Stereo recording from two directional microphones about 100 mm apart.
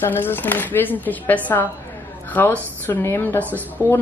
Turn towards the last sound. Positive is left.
turn(degrees=15)  # may be behind; listen again after turning